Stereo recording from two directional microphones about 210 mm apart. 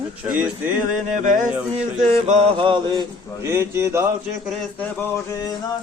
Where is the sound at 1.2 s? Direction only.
40° right (ahead or behind); by 4.0 s 10° right (ahead or behind).